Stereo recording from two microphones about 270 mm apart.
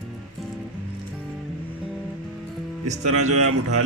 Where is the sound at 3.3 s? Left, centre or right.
Right.